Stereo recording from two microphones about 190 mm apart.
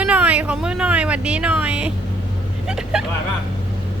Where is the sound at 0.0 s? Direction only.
5° right (ahead or behind).